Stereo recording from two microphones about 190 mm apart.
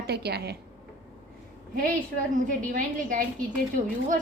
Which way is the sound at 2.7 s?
45° right (ahead or behind).